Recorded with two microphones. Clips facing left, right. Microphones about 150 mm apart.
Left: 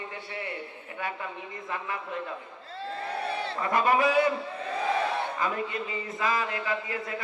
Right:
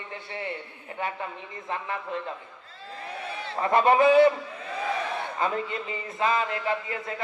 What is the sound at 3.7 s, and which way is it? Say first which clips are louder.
Speech: right 5 dB; 25° right (ahead or behind).